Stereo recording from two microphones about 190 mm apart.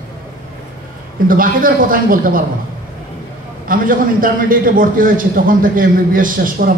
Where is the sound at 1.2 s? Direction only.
45° right (ahead or behind).